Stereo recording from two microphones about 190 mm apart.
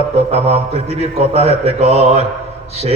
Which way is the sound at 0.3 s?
35° right (ahead or behind).